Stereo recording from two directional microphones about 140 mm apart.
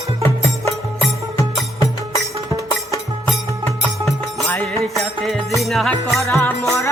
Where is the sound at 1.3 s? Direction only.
25° left (ahead or behind).